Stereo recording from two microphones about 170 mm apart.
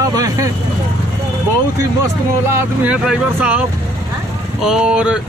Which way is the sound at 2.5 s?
5° right (ahead or behind).